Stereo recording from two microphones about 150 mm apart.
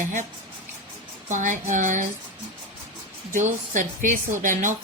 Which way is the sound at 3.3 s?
55° right (ahead or behind).